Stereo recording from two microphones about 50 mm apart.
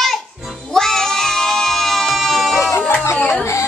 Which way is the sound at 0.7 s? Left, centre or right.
Centre.